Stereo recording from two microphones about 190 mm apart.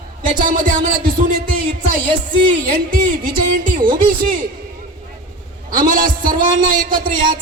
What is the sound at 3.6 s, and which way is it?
Speech, 45° right (ahead or behind).